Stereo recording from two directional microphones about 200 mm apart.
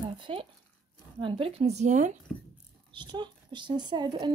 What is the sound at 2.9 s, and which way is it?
A woman's voice, 20° right (ahead or behind).